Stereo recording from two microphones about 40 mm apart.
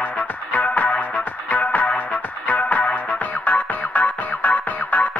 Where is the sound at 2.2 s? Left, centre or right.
Left.